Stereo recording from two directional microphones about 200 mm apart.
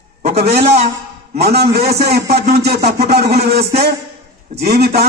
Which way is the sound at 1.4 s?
55° right (ahead or behind).